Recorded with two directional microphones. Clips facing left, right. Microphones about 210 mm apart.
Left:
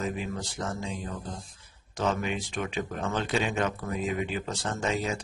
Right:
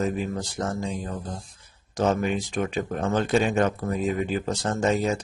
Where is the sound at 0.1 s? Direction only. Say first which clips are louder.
Right 5 dB; 45° right (ahead or behind).